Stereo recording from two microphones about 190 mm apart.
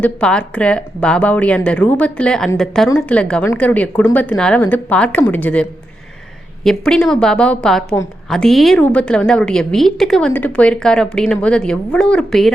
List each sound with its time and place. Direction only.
0.0 s a woman's voice: 5° left (ahead or behind)
6.7 s a woman's voice: 5° left (ahead or behind)